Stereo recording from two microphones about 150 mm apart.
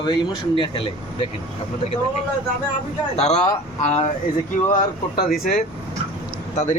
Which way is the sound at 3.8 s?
45° left (ahead or behind).